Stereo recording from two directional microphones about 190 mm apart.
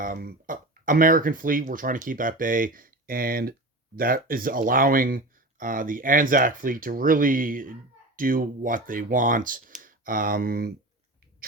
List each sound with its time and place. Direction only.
0.0 s speech: 50° right (ahead or behind)